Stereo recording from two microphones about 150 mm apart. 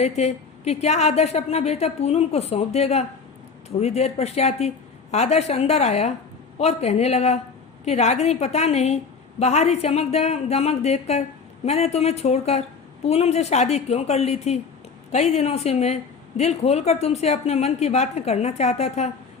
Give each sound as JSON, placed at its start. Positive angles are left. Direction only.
{"t": 0.0, "sound": "a woman's voice", "side_deg": 45}